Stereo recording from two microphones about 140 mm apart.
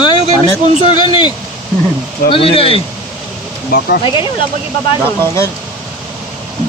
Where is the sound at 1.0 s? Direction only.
35° left (ahead or behind).